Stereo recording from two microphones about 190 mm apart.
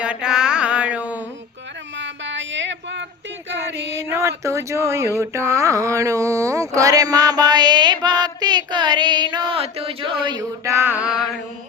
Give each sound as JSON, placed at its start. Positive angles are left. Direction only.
{"t": 0.0, "sound": "mantra", "side_deg": -5}
{"t": 2.0, "sound": "a sound", "side_deg": -70}
{"t": 3.9, "sound": "speech", "side_deg": -15}